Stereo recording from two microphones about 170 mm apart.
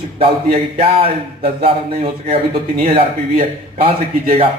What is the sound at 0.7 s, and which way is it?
Speech, 35° right (ahead or behind).